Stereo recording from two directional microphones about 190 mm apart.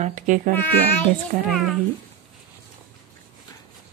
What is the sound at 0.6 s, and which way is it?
Speech, 10° left (ahead or behind).